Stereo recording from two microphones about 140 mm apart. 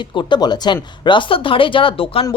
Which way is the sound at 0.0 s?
35° left (ahead or behind).